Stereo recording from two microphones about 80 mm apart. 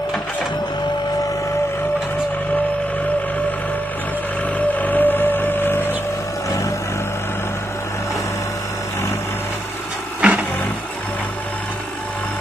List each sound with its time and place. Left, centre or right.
4.6 s vehicle: centre
10.2 s vehicle: centre